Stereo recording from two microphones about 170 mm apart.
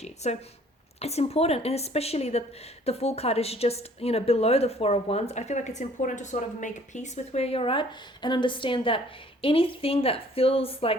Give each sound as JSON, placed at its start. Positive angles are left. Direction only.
{"t": 0.0, "sound": "a woman's voice", "side_deg": 40}